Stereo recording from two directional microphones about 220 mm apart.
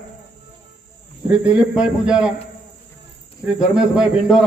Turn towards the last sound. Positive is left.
turn(degrees=-5)  # may be behind; listen again after turning